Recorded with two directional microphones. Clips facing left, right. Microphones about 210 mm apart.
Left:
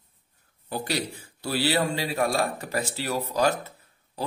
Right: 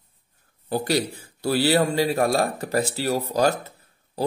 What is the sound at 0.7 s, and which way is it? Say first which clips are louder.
A man's voice: right 6 dB; 40° right (ahead or behind).